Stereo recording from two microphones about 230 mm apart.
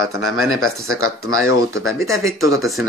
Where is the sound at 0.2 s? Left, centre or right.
Left.